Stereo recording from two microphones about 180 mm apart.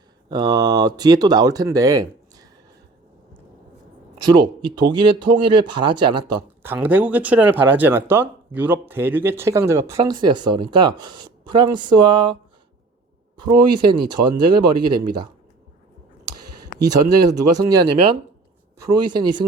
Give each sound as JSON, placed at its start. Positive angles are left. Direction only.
{"t": 0.3, "sound": "speech", "side_deg": -20}
{"t": 4.4, "sound": "speech", "side_deg": -25}
{"t": 16.8, "sound": "speech", "side_deg": -20}